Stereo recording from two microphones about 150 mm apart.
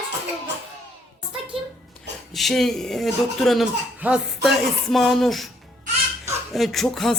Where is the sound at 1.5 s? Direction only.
40° right (ahead or behind).